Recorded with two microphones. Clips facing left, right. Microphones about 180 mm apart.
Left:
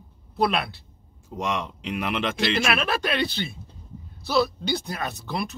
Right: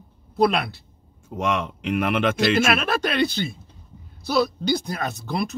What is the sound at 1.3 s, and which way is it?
Speech, 50° right (ahead or behind).